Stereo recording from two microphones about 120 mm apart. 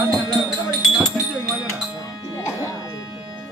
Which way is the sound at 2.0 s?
30° left (ahead or behind).